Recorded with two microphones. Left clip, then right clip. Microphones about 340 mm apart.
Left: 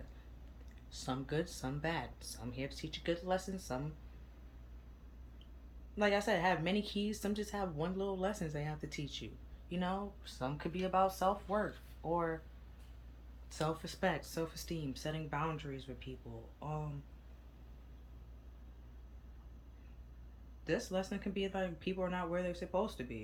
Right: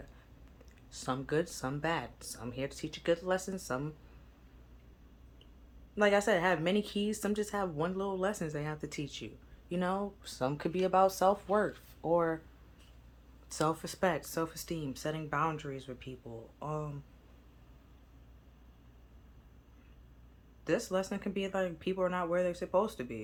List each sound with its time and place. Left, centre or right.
0.9 s speech: centre
6.0 s speech: centre
13.5 s speech: centre
20.7 s speech: centre